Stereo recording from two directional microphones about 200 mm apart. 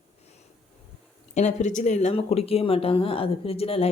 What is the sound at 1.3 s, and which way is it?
Speech, 35° left (ahead or behind).